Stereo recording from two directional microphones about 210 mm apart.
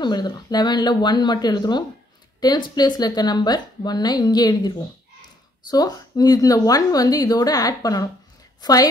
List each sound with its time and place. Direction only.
0.0 s a woman's voice: 20° left (ahead or behind)